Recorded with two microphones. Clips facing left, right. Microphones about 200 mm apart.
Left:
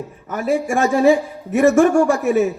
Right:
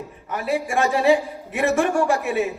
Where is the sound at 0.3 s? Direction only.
45° left (ahead or behind).